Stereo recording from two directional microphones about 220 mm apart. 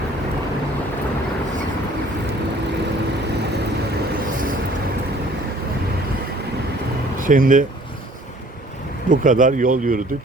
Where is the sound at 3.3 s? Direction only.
50° right (ahead or behind).